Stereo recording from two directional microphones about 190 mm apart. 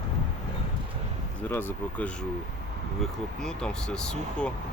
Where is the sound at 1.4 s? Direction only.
10° left (ahead or behind).